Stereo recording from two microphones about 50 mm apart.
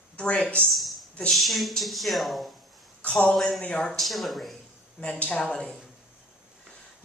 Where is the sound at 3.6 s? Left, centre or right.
Left.